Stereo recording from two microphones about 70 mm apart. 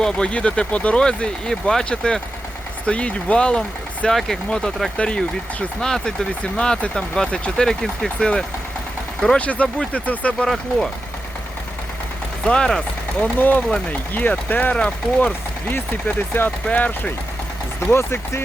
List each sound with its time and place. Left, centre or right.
0.0 s speech: centre
9.4 s speech: centre
10.4 s speech: centre
12.5 s speech: centre
13.1 s speech: left
15.7 s speech: left
17.9 s speech: left